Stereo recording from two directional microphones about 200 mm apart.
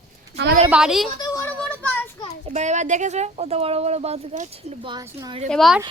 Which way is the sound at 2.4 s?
35° right (ahead or behind).